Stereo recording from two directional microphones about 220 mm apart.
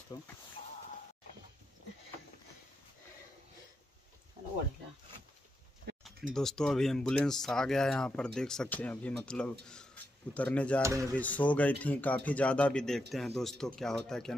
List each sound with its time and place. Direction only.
0.1 s a man's voice: 15° left (ahead or behind)
6.3 s speech: 5° left (ahead or behind)
10.8 s speech: 15° right (ahead or behind)
11.1 s a man's voice: 5° left (ahead or behind)